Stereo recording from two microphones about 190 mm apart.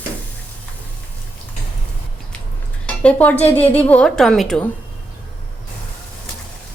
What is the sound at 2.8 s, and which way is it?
Speech, 5° left (ahead or behind).